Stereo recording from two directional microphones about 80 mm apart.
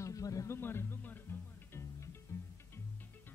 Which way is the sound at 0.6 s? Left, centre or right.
Left.